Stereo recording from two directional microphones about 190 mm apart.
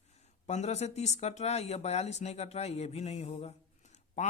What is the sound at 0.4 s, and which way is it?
Speech, 35° left (ahead or behind).